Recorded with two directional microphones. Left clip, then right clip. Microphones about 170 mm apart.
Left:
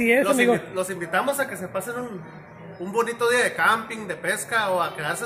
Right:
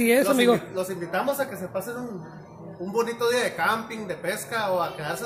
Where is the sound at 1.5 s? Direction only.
5° left (ahead or behind).